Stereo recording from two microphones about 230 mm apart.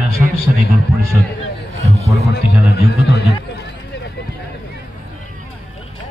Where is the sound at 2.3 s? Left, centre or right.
Left.